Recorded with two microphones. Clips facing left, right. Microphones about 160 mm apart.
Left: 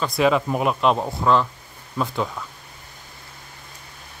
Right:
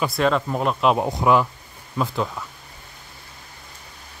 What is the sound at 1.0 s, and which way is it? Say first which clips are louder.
Speech: right 1 dB; 15° right (ahead or behind).